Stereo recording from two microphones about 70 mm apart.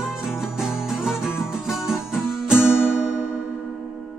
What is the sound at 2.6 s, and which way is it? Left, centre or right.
Music, left.